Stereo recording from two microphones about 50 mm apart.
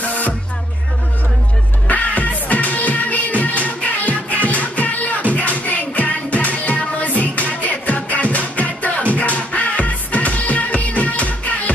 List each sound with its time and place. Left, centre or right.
1.9 s music: left